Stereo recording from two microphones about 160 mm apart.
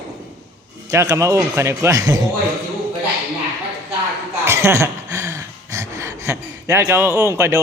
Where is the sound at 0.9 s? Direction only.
20° right (ahead or behind).